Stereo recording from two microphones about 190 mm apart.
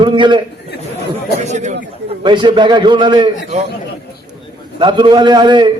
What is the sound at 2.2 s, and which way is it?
A man's voice, 25° right (ahead or behind).